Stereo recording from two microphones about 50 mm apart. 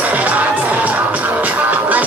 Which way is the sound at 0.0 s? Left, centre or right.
Right.